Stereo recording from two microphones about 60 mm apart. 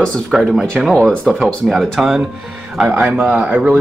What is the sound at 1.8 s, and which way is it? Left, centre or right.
A man's voice, centre.